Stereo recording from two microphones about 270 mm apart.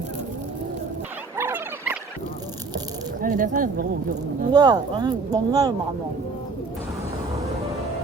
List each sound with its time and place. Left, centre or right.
1.4 s a sound: centre
3.2 s speech: right
4.5 s speech: centre